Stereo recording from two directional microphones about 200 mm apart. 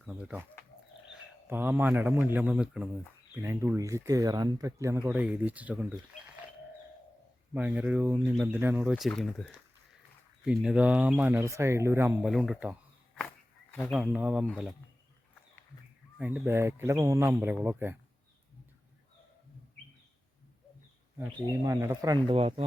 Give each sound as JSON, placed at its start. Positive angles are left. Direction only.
{"t": 0.0, "sound": "a man's voice", "side_deg": -5}
{"t": 7.5, "sound": "speech", "side_deg": -10}
{"t": 13.1, "sound": "a sound", "side_deg": 5}
{"t": 13.9, "sound": "speech", "side_deg": -5}
{"t": 16.1, "sound": "speech", "side_deg": -5}
{"t": 21.2, "sound": "a man's voice", "side_deg": -15}